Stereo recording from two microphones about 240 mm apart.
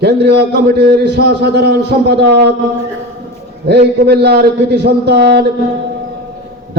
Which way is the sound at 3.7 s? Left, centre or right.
Right.